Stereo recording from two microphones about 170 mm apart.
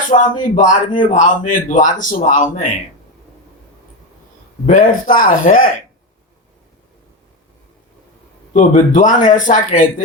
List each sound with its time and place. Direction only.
0.1 s a man's voice: 50° left (ahead or behind)
4.6 s a man's voice: 50° left (ahead or behind)
8.5 s a man's voice: 45° left (ahead or behind)